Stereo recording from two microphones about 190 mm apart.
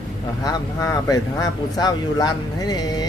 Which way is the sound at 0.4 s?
20° left (ahead or behind).